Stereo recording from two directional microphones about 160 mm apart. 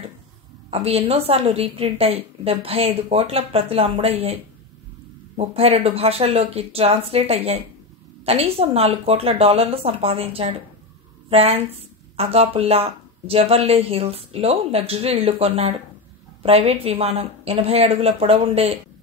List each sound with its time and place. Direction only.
0.7 s a woman's voice: 40° right (ahead or behind)
5.4 s a woman's voice: 40° right (ahead or behind)